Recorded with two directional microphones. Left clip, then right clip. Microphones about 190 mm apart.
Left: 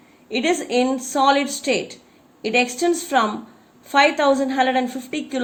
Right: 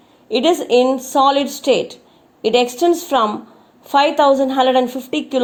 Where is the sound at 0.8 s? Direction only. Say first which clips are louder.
Right 4 dB; 25° right (ahead or behind).